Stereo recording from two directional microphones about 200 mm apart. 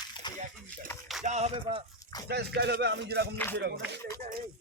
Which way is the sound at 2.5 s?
55° right (ahead or behind).